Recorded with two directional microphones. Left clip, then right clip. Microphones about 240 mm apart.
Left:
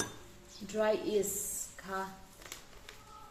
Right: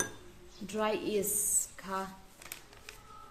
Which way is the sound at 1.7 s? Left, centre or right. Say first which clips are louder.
Right 2 dB; right.